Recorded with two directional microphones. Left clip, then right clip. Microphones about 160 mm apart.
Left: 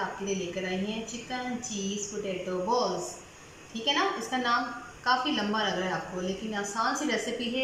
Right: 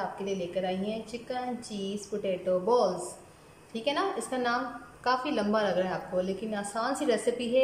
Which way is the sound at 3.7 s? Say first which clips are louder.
Left 2 dB; 20° right (ahead or behind).